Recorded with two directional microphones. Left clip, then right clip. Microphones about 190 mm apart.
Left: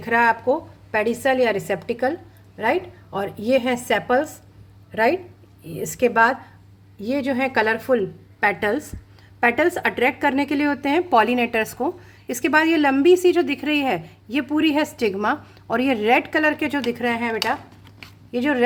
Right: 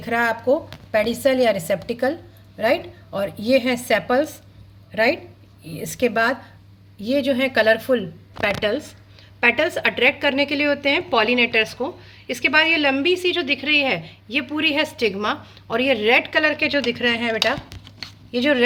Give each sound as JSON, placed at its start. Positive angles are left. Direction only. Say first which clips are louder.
{"t": 0.0, "sound": "a woman's voice", "louder": "left 3 dB", "side_deg": 45}